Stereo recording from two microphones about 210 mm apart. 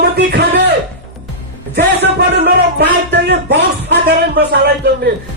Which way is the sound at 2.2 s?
50° right (ahead or behind).